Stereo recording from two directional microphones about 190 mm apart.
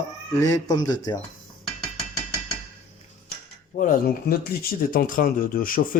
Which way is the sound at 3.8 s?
45° left (ahead or behind).